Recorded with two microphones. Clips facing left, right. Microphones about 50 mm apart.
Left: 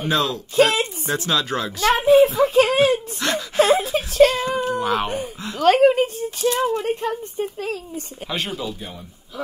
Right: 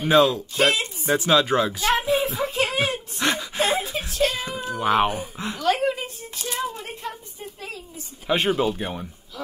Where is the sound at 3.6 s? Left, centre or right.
Left.